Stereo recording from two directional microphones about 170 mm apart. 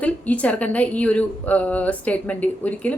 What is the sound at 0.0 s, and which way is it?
A woman's voice, 10° left (ahead or behind).